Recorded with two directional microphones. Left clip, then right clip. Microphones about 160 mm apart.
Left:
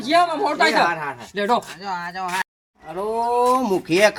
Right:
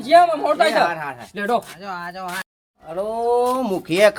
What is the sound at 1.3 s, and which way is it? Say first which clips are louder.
Speech: left 1 dB; 80° right.